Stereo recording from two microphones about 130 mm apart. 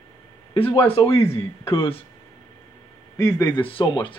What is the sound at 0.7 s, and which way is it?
Speech, 45° left (ahead or behind).